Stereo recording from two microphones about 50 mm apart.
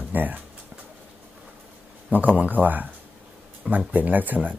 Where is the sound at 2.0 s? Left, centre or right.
Right.